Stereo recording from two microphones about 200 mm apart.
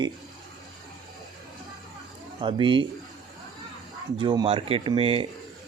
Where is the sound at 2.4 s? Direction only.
25° right (ahead or behind).